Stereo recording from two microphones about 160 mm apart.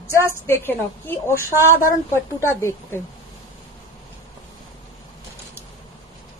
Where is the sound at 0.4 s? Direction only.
15° left (ahead or behind).